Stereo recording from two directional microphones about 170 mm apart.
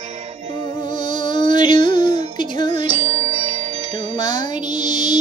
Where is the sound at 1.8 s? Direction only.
45° right (ahead or behind).